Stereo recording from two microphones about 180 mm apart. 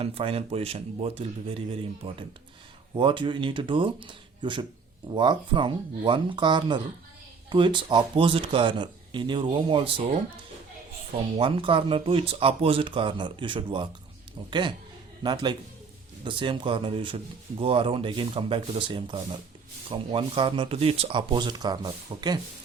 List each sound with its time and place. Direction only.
0.0 s speech: 30° right (ahead or behind)
11.3 s speech: 30° right (ahead or behind)
15.2 s speech: 25° right (ahead or behind)